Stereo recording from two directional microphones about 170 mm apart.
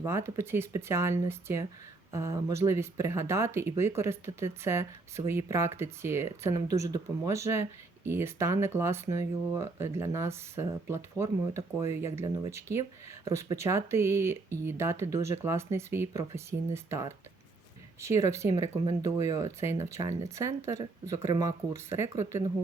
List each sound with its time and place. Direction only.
0.0 s speech: 15° right (ahead or behind)
18.9 s speech: 25° right (ahead or behind)
19.5 s speech: 15° right (ahead or behind)